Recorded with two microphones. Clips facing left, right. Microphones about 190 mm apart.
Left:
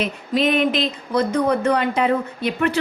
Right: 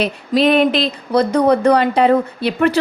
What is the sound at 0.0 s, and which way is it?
A woman's voice, 35° right (ahead or behind).